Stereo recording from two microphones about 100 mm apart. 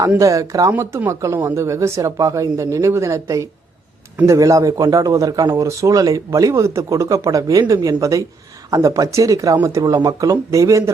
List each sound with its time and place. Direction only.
0.2 s speech: 35° right (ahead or behind)